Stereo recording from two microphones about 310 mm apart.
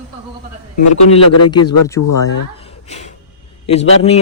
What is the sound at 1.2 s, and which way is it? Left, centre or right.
Speech, left.